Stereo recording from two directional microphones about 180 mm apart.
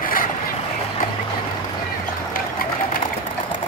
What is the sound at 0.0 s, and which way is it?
Vehicle, 50° left (ahead or behind).